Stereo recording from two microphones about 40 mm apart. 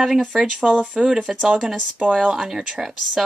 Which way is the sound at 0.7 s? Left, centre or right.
Right.